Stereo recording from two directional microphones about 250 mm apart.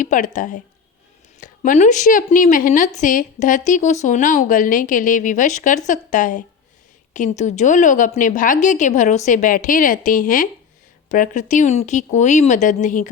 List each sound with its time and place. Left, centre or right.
0.0 s a woman's voice: left